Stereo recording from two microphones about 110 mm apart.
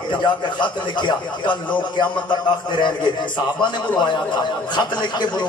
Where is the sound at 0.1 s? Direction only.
45° left (ahead or behind).